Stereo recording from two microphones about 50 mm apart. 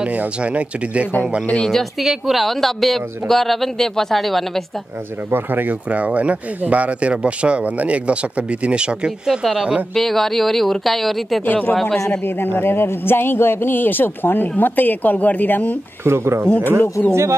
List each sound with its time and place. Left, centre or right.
0.1 s speech: right
1.7 s speech: centre
5.3 s speech: right; by 9.5 s centre
9.9 s speech: centre
11.4 s a woman's voice: left
12.3 s a man's voice: left
16.0 s speech: right
16.4 s a woman's voice: left
17.1 s speech: right